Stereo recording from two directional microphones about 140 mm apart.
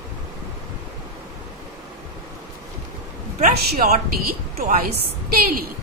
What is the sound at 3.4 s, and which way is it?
A woman's voice, 75° right (ahead or behind).